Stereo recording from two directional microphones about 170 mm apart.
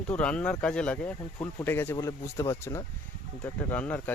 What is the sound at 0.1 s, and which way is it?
Speech, 5° left (ahead or behind).